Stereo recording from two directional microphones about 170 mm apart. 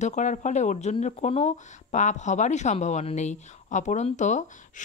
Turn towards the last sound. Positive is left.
turn(degrees=45)  # may be behind; listen again after turning